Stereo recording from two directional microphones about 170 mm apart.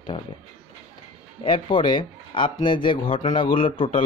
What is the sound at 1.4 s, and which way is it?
Speech, 30° left (ahead or behind).